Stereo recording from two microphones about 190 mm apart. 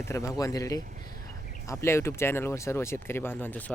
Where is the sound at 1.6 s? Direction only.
15° left (ahead or behind).